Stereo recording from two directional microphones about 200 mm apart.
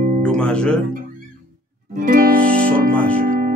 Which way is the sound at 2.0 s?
45° right (ahead or behind).